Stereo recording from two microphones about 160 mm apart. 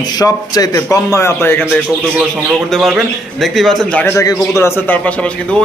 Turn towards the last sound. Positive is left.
turn(degrees=10)  # may be behind; listen again after turning